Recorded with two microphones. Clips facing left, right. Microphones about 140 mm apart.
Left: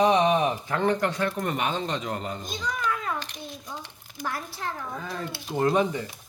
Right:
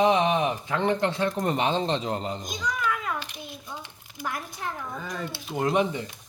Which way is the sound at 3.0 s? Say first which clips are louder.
Left 1 dB; 5° right (ahead or behind).